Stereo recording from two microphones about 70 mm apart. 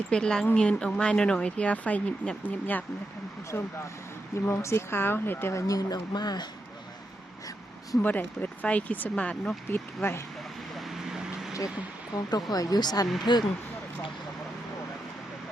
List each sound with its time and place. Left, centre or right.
0.1 s speech: centre
3.5 s speech: left
5.5 s speech: left
8.0 s speech: left
9.6 s speech: left
10.8 s vehicle: centre
12.1 s speech: left
13.3 s speech: left